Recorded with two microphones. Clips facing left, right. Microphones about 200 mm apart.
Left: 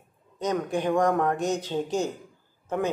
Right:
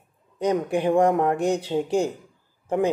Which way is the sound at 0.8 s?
30° right (ahead or behind).